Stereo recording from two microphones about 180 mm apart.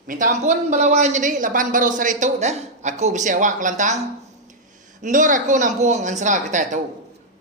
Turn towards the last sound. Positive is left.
turn(degrees=-45)  # may be behind; listen again after turning